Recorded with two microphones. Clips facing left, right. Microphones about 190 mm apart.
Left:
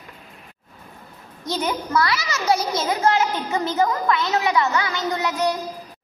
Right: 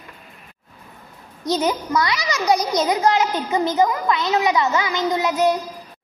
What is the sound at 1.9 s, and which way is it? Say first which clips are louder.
A woman's voice: right 1 dB; 15° right (ahead or behind).